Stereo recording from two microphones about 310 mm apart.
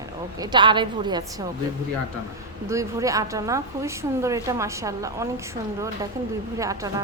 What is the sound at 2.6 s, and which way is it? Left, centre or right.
A woman's voice, centre.